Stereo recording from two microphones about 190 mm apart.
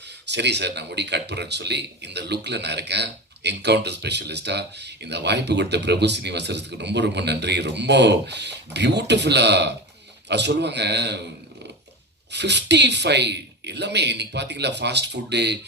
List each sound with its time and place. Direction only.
0.3 s speech: 65° right (ahead or behind)
12.3 s speech: 65° right (ahead or behind)